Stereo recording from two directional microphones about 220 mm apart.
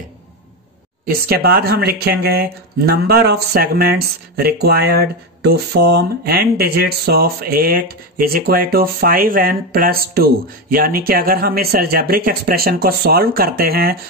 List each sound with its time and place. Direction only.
1.0 s speech: 45° right (ahead or behind)